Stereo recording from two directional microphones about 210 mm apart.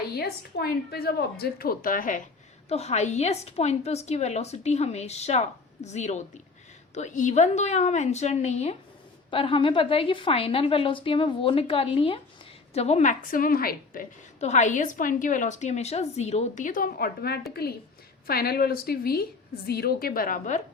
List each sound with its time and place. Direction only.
0.1 s a woman's voice: 50° left (ahead or behind)